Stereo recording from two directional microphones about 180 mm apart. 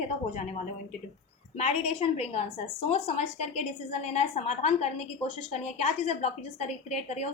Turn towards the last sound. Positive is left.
turn(degrees=35)  # may be behind; listen again after turning